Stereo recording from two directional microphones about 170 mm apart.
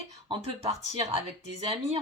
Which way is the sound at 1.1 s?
35° right (ahead or behind).